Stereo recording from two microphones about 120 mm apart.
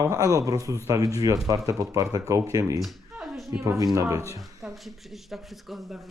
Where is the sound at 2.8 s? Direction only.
5° right (ahead or behind).